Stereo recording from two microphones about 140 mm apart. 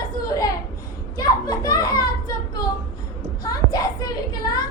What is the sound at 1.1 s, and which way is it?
Children playing, 25° left (ahead or behind).